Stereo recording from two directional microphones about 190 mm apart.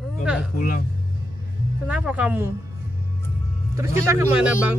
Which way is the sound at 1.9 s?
5° right (ahead or behind).